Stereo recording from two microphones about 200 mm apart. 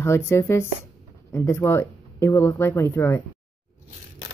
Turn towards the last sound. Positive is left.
turn(degrees=10)  # may be behind; listen again after turning